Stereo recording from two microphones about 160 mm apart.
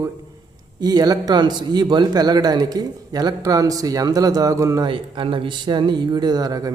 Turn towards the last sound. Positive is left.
turn(degrees=-25)  # may be behind; listen again after turning